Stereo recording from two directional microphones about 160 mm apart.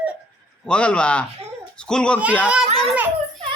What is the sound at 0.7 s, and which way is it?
A child's voice, 5° left (ahead or behind).